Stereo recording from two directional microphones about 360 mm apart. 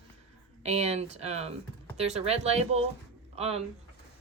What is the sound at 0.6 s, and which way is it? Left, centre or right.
Speech, centre.